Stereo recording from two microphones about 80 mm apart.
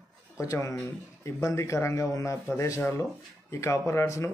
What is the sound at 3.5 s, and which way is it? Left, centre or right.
Speech, left.